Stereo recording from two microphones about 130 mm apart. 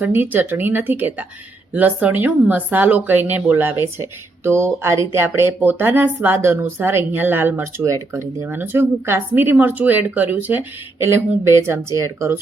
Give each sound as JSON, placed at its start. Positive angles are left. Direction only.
{"t": 0.0, "sound": "speech", "side_deg": -15}